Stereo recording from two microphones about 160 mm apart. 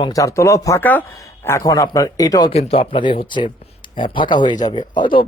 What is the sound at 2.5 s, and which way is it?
Speech, 40° left (ahead or behind).